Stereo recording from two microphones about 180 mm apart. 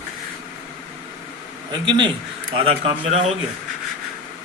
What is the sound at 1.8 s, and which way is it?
Speech, 25° right (ahead or behind).